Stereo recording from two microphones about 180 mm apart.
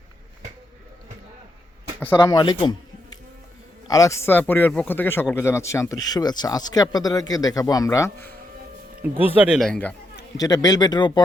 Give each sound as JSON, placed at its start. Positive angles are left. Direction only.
{"t": 2.2, "sound": "a man's voice", "side_deg": 25}
{"t": 3.8, "sound": "a man's voice", "side_deg": 20}
{"t": 9.1, "sound": "speech", "side_deg": -10}
{"t": 10.3, "sound": "a man's voice", "side_deg": 20}